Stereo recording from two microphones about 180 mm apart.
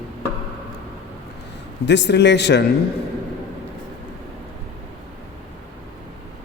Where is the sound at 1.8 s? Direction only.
75° left (ahead or behind).